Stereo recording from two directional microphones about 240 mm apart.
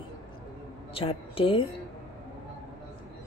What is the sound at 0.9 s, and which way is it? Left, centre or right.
Speech, left.